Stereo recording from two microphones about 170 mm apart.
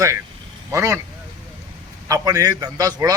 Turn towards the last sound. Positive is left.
turn(degrees=-20)  # may be behind; listen again after turning